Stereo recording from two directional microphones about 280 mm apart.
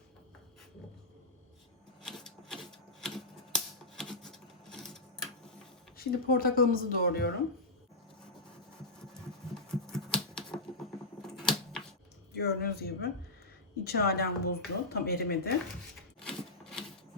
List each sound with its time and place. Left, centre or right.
2.0 s typewriter: centre
6.0 s speech: left
9.8 s typewriter: centre
11.2 s a sound: centre
12.4 s speech: left
16.2 s rub: centre